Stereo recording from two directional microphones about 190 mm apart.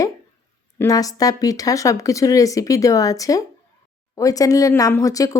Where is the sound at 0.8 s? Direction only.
20° left (ahead or behind).